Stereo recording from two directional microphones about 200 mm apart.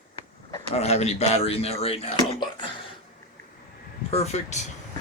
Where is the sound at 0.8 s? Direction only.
30° left (ahead or behind).